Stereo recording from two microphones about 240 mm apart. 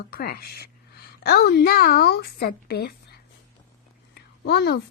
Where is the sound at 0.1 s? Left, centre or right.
Left.